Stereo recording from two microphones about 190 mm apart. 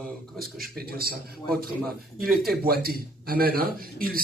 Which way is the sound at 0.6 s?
55° right (ahead or behind).